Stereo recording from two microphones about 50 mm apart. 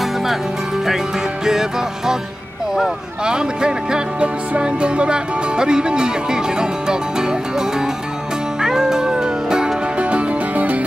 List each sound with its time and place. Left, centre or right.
1.4 s music: centre
2.7 s speech: centre
8.5 s music: centre; by 10.8 s right